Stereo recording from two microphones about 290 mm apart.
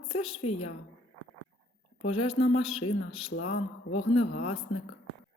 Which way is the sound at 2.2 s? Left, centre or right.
Centre.